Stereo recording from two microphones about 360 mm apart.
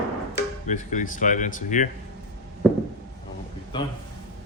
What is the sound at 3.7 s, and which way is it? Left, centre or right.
Speech, centre.